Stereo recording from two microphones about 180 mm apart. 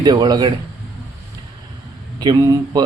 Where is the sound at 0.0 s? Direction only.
20° right (ahead or behind).